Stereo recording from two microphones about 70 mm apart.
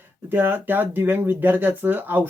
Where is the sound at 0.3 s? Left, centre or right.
Right.